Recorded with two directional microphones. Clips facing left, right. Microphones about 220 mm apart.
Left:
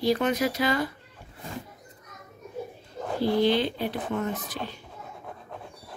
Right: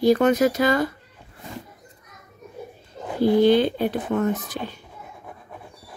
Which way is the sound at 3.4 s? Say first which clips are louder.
Right 7 dB; 50° right (ahead or behind).